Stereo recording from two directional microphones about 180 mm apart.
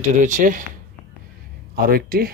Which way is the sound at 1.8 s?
55° right (ahead or behind).